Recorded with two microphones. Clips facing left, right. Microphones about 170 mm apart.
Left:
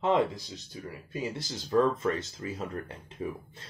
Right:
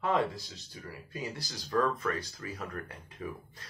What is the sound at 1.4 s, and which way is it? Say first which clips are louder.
Speech: left 5 dB; 25° left (ahead or behind).